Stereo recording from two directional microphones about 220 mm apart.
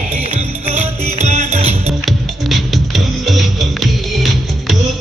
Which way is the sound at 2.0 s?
Centre (ahead or behind).